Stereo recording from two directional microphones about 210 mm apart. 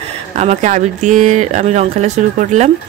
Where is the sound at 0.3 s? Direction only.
35° right (ahead or behind).